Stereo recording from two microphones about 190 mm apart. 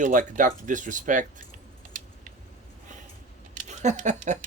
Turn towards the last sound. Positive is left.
turn(degrees=-40)  # may be behind; listen again after turning